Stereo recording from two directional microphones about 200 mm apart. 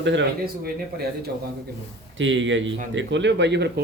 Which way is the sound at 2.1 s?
70° right (ahead or behind).